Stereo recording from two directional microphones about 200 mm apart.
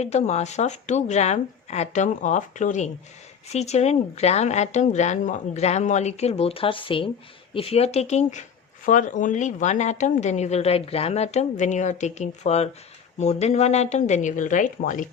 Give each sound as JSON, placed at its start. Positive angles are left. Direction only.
{"t": 0.0, "sound": "a woman's voice", "side_deg": 35}